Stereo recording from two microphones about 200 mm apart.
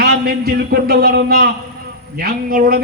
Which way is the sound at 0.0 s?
50° right (ahead or behind).